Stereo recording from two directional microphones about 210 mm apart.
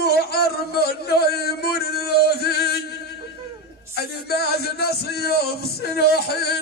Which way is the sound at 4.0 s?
50° left (ahead or behind).